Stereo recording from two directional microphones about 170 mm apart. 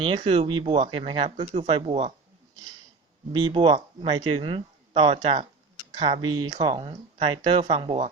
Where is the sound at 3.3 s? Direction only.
30° right (ahead or behind).